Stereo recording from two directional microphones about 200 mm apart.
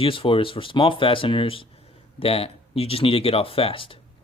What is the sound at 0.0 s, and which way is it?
Speech, 25° left (ahead or behind).